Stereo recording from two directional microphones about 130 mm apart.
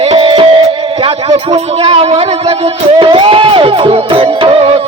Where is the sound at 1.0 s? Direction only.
50° right (ahead or behind).